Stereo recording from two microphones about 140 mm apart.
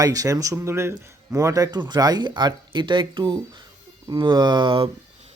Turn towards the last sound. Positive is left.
turn(degrees=-45)  # may be behind; listen again after turning